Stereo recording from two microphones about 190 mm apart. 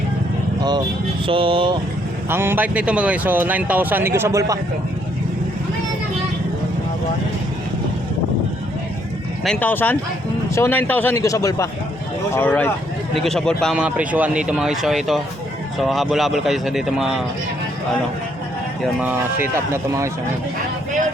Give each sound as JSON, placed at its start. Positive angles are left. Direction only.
{"t": 1.3, "sound": "speech", "side_deg": -30}
{"t": 2.3, "sound": "speech", "side_deg": -10}
{"t": 9.4, "sound": "speech", "side_deg": 5}
{"t": 18.8, "sound": "speech", "side_deg": -5}